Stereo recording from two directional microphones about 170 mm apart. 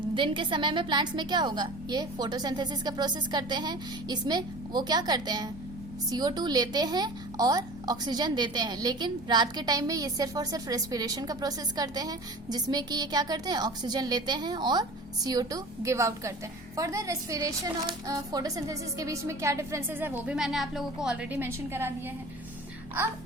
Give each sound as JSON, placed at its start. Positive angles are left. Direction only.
{"t": 0.1, "sound": "a woman's voice", "side_deg": -30}